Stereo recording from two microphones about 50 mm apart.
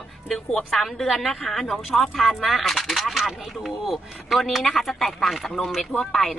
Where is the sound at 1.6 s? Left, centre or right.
Centre.